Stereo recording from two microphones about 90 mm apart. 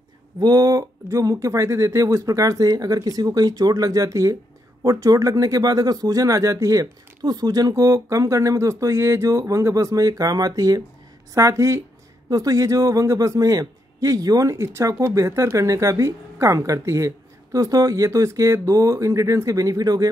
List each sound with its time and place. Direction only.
0.4 s speech: 45° right (ahead or behind)